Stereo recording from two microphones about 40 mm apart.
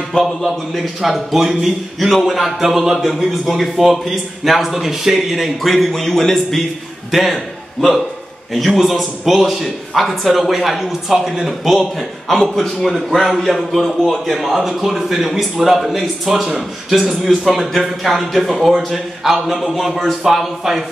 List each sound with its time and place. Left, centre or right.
0.1 s a man's voice: centre
1.0 s a man's voice: centre
7.1 s a man's voice: centre
8.5 s a man's voice: centre
17.6 s a man's voice: centre